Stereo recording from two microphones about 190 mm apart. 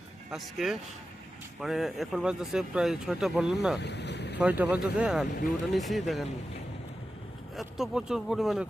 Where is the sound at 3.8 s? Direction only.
65° left (ahead or behind).